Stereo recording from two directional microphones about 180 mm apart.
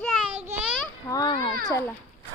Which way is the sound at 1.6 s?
20° left (ahead or behind).